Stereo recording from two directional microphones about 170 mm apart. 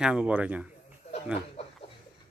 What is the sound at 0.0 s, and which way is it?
Speech, 5° right (ahead or behind).